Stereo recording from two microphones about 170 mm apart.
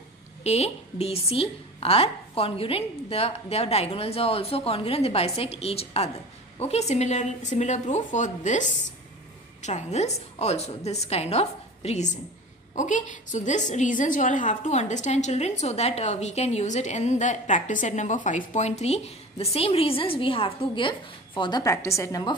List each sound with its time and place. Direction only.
0.4 s a woman's voice: 40° left (ahead or behind); by 22.3 s 20° left (ahead or behind)